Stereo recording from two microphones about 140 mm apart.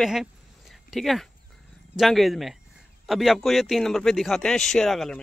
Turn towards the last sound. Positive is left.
turn(degrees=0)  # may be behind; listen again after turning